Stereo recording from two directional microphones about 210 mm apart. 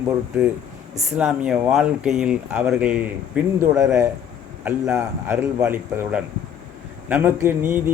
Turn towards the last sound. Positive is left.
turn(degrees=-10)  # may be behind; listen again after turning